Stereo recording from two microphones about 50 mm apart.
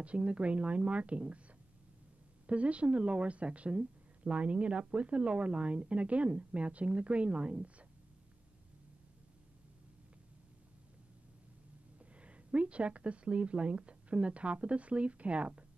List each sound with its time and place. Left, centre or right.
0.0 s a woman's voice: right
2.4 s a woman's voice: right
12.2 s a woman's voice: right